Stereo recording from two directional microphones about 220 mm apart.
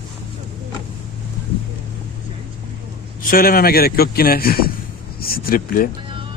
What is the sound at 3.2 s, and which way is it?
A man's voice, 40° left (ahead or behind).